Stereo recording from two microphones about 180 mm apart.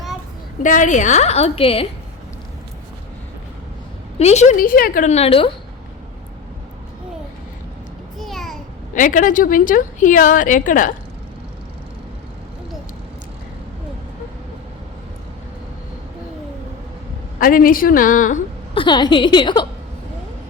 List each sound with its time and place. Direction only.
0.6 s a woman's voice: 45° left (ahead or behind)
4.2 s a woman's voice: 40° left (ahead or behind)
8.2 s babbling: centre (ahead or behind)
9.0 s a woman's voice: 45° left (ahead or behind)
17.4 s a woman's voice: 50° left (ahead or behind)
18.7 s a woman's voice: 25° left (ahead or behind)